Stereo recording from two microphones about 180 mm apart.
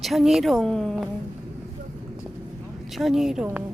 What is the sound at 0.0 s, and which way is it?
A woman's voice, centre (ahead or behind).